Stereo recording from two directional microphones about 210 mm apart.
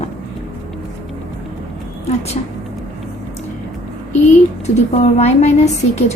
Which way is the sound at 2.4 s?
35° left (ahead or behind).